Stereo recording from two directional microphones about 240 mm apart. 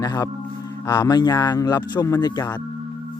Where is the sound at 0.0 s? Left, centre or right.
Centre.